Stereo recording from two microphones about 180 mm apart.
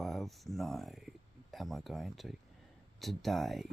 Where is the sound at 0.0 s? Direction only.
Centre (ahead or behind).